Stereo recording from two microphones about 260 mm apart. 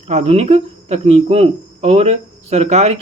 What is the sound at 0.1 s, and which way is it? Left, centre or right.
Speech, right.